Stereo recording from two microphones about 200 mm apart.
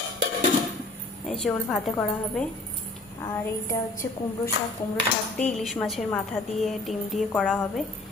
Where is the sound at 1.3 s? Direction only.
Centre (ahead or behind).